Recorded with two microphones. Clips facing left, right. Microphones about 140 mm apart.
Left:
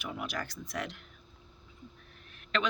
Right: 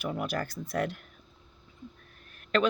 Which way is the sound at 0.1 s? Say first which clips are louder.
Right 5 dB; 50° right (ahead or behind).